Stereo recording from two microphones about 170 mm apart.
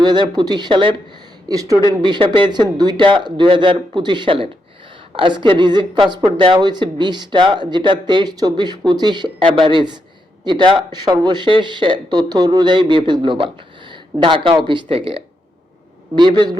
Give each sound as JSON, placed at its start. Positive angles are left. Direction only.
{"t": 0.0, "sound": "a woman's voice", "side_deg": -25}
{"t": 1.7, "sound": "speech", "side_deg": 20}
{"t": 2.0, "sound": "a woman's voice", "side_deg": -25}